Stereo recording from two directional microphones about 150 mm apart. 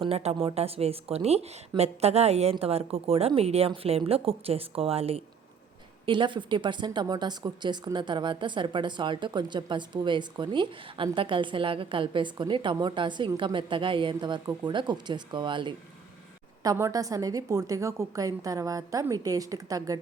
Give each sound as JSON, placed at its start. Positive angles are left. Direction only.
{"t": 0.0, "sound": "a woman's voice", "side_deg": -45}
{"t": 16.6, "sound": "a woman's voice", "side_deg": -20}